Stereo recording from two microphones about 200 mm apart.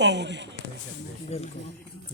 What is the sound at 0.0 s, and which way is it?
Speech, 60° right (ahead or behind).